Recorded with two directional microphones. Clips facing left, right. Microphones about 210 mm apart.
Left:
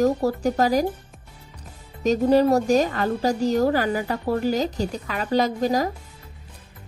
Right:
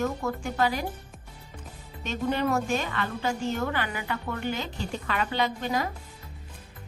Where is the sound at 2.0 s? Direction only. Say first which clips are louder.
Left 10 dB; 40° left (ahead or behind).